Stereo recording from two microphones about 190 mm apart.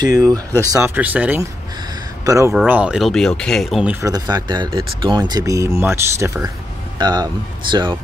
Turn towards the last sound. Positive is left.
turn(degrees=-25)  # may be behind; listen again after turning